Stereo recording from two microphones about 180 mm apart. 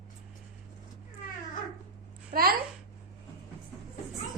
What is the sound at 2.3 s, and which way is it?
Babbling, 55° right (ahead or behind).